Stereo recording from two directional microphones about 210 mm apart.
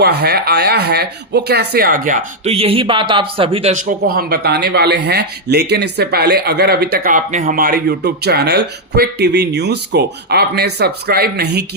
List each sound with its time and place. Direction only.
0.0 s speech: 50° right (ahead or behind)